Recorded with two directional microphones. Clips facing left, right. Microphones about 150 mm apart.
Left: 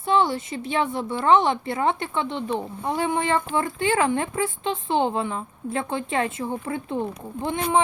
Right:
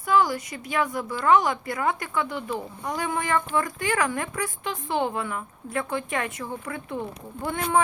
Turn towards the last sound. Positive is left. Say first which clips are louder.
# left 2 dB
turn(degrees=20)  # may be behind; listen again after turning